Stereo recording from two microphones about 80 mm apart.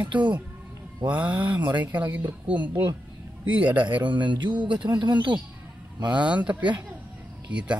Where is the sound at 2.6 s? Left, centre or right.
Right.